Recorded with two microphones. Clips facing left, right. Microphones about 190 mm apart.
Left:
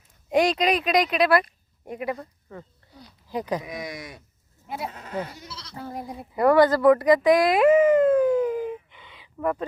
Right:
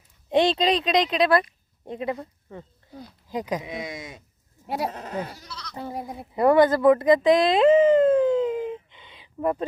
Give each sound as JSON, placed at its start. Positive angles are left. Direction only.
{"t": 0.3, "sound": "speech", "side_deg": -25}
{"t": 4.8, "sound": "speech", "side_deg": -35}
{"t": 5.5, "sound": "goat", "side_deg": 25}
{"t": 5.9, "sound": "speech", "side_deg": -5}
{"t": 6.3, "sound": "a sound", "side_deg": -25}